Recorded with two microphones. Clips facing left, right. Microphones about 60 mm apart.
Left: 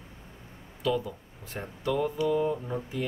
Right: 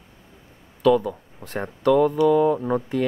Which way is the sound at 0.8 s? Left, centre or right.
Right.